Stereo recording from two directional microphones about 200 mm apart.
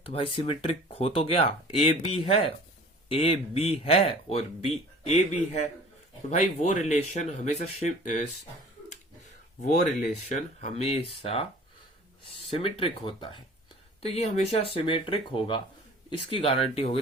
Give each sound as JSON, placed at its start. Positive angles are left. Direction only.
{"t": 0.0, "sound": "speech", "side_deg": 30}
{"t": 10.2, "sound": "speech", "side_deg": 35}
{"t": 12.5, "sound": "speech", "side_deg": 25}